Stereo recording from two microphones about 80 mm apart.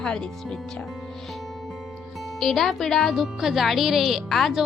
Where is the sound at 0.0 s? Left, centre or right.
Centre.